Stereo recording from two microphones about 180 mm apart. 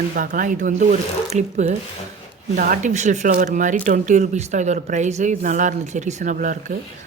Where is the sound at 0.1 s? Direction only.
50° right (ahead or behind).